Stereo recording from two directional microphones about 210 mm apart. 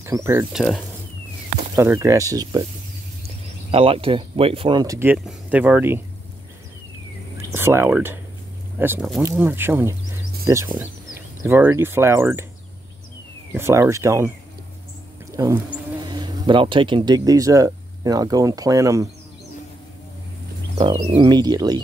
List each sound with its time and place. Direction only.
0.0 s speech: 15° right (ahead or behind)
1.8 s speech: 15° right (ahead or behind)
3.7 s speech: 25° right (ahead or behind); by 6.0 s 10° right (ahead or behind)
7.5 s speech: 10° right (ahead or behind)
13.5 s speech: 10° right (ahead or behind)
15.3 s speech: 15° right (ahead or behind)
20.7 s speech: 25° right (ahead or behind)